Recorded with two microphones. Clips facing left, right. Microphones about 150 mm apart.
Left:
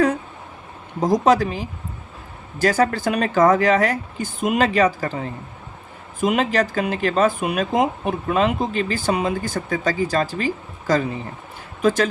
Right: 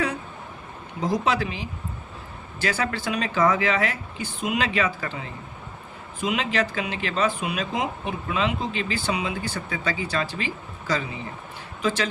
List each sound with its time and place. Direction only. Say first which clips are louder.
0.9 s speech: left 7 dB; 45° left (ahead or behind)